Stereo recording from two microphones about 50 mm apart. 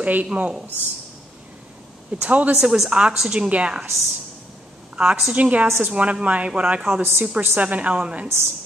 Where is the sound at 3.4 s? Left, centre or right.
Right.